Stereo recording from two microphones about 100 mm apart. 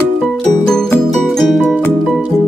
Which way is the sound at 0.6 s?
5° left (ahead or behind).